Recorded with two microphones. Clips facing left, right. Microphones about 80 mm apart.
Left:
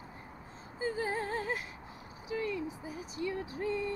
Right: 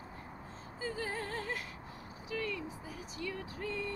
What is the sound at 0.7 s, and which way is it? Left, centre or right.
Music, left.